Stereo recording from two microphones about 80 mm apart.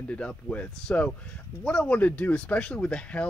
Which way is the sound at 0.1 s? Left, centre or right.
Centre.